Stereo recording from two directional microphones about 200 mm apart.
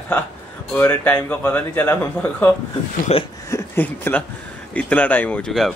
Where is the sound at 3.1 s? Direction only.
30° left (ahead or behind).